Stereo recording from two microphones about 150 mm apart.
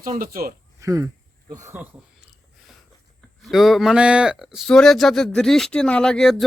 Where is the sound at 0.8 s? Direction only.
20° right (ahead or behind).